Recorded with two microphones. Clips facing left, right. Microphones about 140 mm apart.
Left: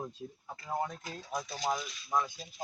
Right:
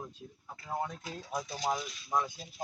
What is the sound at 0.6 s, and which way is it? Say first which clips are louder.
Speech: left 1 dB; centre (ahead or behind).